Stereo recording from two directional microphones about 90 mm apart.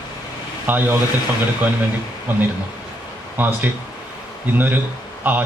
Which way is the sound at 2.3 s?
20° right (ahead or behind).